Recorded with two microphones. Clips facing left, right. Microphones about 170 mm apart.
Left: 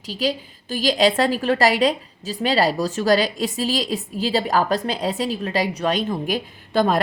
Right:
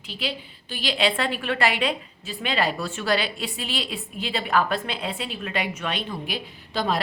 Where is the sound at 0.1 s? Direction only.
40° left (ahead or behind).